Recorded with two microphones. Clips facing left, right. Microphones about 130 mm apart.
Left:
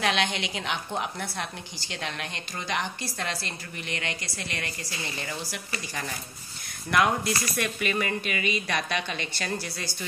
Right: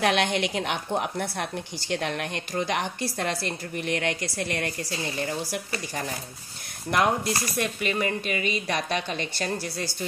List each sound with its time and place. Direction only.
0.0 s a woman's voice: 50° right (ahead or behind)